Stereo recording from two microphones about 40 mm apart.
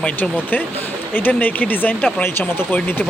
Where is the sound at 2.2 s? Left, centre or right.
Left.